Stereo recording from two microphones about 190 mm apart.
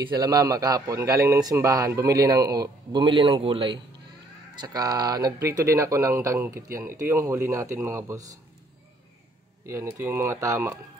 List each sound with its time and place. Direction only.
0.1 s a man's voice: 20° right (ahead or behind)
9.7 s speech: 15° right (ahead or behind)